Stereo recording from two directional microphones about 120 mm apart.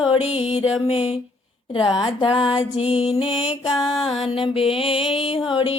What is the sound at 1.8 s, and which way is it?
Music, 45° left (ahead or behind).